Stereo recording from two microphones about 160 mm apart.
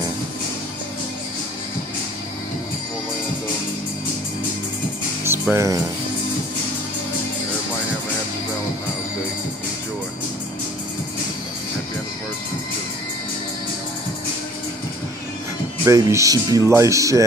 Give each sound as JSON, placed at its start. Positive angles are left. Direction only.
{"t": 5.2, "sound": "music", "side_deg": -15}
{"t": 15.8, "sound": "speech", "side_deg": -20}